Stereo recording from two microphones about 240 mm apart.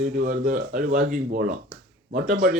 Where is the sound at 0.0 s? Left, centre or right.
Right.